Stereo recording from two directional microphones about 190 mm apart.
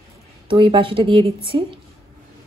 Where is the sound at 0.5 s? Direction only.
30° right (ahead or behind).